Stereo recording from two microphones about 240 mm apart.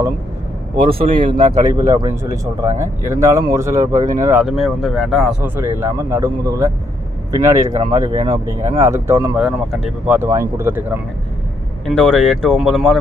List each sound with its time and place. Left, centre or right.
0.9 s speech: right
1.7 s speech: centre
11.9 s speech: centre